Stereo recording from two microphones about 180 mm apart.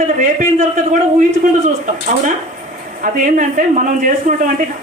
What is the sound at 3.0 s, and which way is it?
Speech, 45° right (ahead or behind).